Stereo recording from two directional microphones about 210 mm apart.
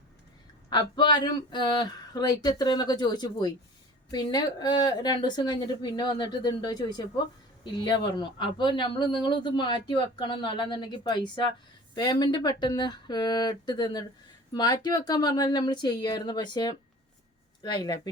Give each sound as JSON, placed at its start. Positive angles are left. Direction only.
{"t": 0.7, "sound": "speech", "side_deg": 20}